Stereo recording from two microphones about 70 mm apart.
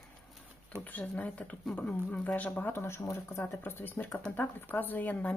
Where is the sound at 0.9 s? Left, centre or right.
Left.